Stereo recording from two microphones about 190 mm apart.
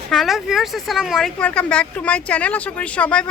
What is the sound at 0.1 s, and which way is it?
Speech, centre (ahead or behind).